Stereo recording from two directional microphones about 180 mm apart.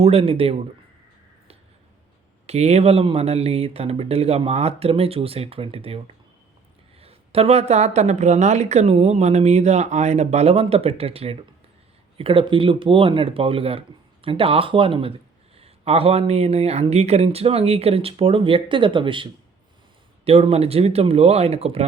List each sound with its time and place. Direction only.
0.0 s a woman's voice: 35° right (ahead or behind)
2.5 s a woman's voice: 35° right (ahead or behind)
7.0 s a woman's voice: 35° right (ahead or behind)